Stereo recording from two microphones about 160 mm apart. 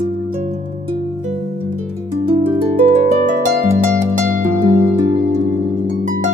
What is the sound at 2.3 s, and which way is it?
Harp, 35° right (ahead or behind).